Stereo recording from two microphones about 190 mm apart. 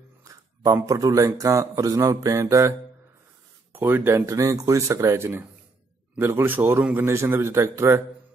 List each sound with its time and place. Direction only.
0.2 s speech: 15° right (ahead or behind)
3.7 s speech: 10° right (ahead or behind)